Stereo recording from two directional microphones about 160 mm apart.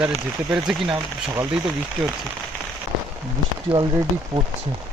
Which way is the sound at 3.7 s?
10° right (ahead or behind).